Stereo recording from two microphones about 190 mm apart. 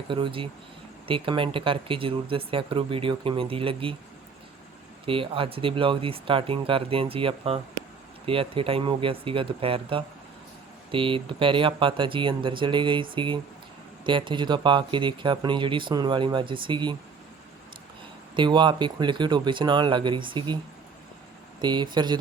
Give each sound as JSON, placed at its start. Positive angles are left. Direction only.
{"t": 0.1, "sound": "speech", "side_deg": -25}
{"t": 5.0, "sound": "speech", "side_deg": -30}
{"t": 18.3, "sound": "speech", "side_deg": -25}
{"t": 21.6, "sound": "speech", "side_deg": -25}